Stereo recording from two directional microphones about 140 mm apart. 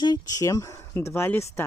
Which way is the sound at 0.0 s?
30° left (ahead or behind).